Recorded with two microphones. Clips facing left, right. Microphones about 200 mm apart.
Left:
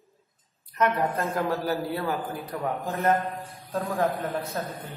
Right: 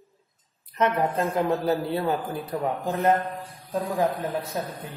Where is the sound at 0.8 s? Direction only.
20° right (ahead or behind).